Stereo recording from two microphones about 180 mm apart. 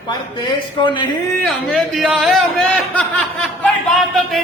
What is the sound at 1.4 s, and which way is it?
Speech, 5° left (ahead or behind).